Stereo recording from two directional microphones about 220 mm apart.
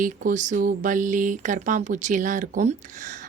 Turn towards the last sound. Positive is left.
turn(degrees=-35)  # may be behind; listen again after turning